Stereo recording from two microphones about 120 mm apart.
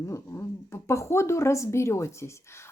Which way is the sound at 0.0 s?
25° left (ahead or behind).